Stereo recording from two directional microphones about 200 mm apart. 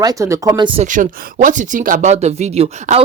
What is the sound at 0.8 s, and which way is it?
Speech, 40° right (ahead or behind).